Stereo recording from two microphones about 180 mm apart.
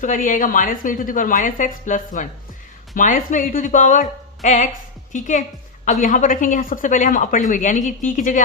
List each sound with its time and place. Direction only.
0.0 s a woman's voice: 45° left (ahead or behind)